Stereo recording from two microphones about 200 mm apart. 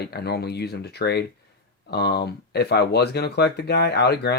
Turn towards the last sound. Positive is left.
turn(degrees=55)  # may be behind; listen again after turning